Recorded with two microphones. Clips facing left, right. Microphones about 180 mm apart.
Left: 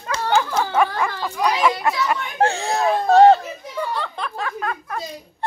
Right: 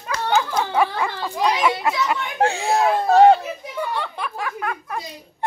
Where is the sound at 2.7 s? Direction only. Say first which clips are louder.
Left 1 dB; 5° right (ahead or behind).